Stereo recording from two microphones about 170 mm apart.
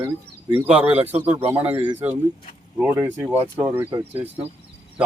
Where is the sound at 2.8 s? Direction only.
15° right (ahead or behind).